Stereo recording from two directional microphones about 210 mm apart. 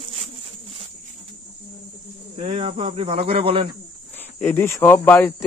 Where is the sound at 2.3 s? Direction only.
30° right (ahead or behind).